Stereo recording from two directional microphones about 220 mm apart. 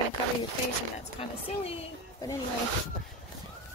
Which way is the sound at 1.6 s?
25° left (ahead or behind).